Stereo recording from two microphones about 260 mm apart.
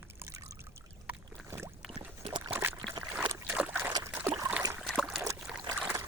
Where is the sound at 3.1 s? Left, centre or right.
Centre.